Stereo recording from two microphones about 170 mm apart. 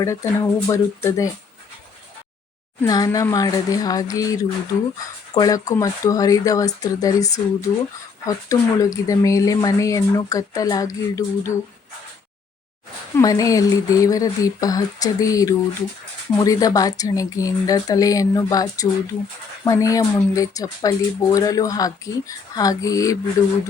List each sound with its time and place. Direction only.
0.0 s speech: 15° left (ahead or behind)
2.8 s speech: 20° left (ahead or behind)
13.1 s speech: 20° left (ahead or behind)